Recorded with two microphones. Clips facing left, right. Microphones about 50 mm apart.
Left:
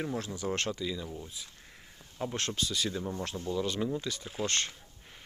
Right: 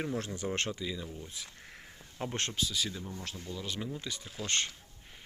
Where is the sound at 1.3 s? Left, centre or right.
Right.